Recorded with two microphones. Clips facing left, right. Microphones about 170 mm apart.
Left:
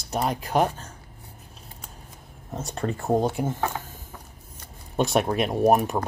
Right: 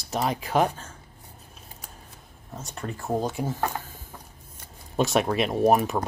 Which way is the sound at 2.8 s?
25° left (ahead or behind).